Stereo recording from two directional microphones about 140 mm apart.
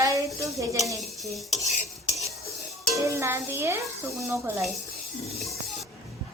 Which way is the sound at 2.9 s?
20° right (ahead or behind).